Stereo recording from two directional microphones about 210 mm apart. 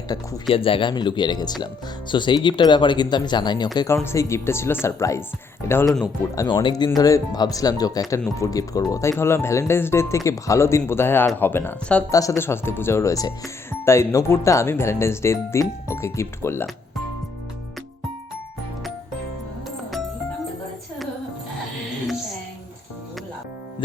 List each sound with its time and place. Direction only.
0.1 s speech: 25° left (ahead or behind)